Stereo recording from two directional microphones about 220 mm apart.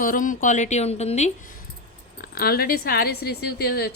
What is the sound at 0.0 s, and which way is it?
A woman's voice, 40° left (ahead or behind).